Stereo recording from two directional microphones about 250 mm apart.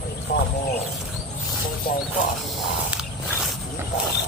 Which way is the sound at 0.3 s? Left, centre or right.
Left.